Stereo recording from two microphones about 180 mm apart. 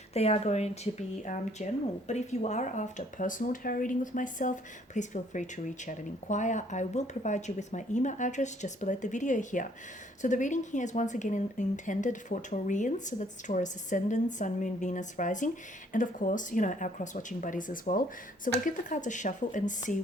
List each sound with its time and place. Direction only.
0.1 s speech: 35° left (ahead or behind)